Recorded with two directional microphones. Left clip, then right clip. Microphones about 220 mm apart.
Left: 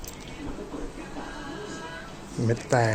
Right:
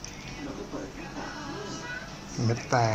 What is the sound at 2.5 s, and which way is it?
Speech, 20° left (ahead or behind).